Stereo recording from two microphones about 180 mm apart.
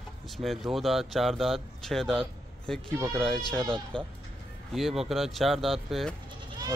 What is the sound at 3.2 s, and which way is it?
Speech, 5° left (ahead or behind).